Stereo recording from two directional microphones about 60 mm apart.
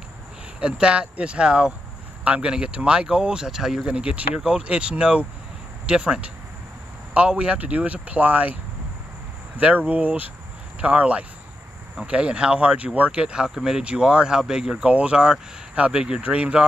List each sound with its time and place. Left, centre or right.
0.6 s speech: centre
9.6 s speech: right